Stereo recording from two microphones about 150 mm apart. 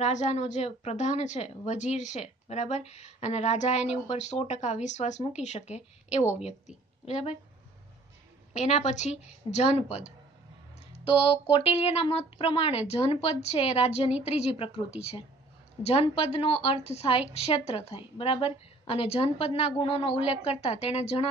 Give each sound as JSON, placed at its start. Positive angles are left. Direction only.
{"t": 0.0, "sound": "a woman's voice", "side_deg": 50}
{"t": 8.5, "sound": "a woman's voice", "side_deg": 50}
{"t": 11.5, "sound": "a woman's voice", "side_deg": 40}